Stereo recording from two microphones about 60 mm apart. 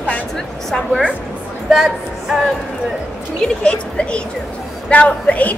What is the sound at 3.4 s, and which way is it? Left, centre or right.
A woman's voice, centre.